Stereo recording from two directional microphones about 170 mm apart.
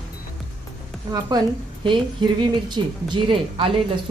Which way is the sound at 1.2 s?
25° right (ahead or behind).